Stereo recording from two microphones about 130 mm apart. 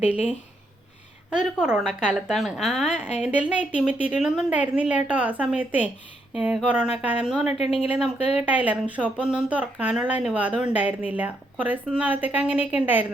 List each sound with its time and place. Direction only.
1.3 s a woman's voice: 5° right (ahead or behind)
7.6 s speech: 55° left (ahead or behind)
7.9 s a woman's voice: 5° right (ahead or behind)